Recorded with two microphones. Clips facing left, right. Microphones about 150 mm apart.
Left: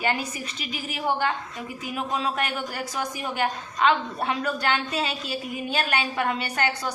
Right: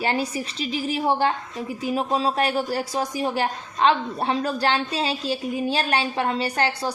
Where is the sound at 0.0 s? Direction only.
30° right (ahead or behind).